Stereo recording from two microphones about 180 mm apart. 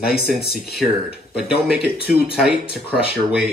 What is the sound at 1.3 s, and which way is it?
Speech, 5° right (ahead or behind).